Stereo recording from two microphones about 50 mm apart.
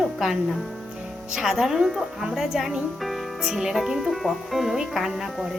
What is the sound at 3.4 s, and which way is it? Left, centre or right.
A woman's voice, centre.